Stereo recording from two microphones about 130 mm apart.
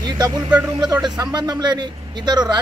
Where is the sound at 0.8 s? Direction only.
30° right (ahead or behind).